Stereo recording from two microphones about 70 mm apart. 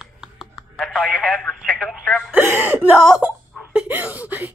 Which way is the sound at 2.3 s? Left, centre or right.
Right.